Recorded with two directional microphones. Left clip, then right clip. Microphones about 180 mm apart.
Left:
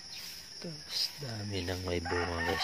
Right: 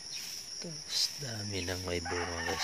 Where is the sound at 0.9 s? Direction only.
10° right (ahead or behind); by 2.6 s 15° left (ahead or behind).